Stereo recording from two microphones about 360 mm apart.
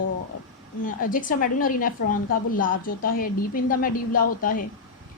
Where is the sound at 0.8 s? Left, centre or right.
Left.